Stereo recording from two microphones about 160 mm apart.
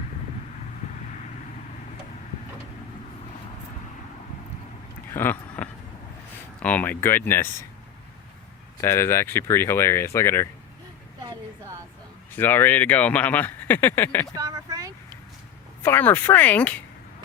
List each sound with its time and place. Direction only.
5.1 s speech: 10° left (ahead or behind)
8.8 s speech: 15° left (ahead or behind)
12.4 s speech: 10° left (ahead or behind)
14.3 s a sound: 20° right (ahead or behind)
15.8 s speech: 15° left (ahead or behind)